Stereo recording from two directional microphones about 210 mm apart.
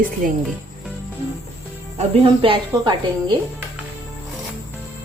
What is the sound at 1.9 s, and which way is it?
Speech, 25° right (ahead or behind).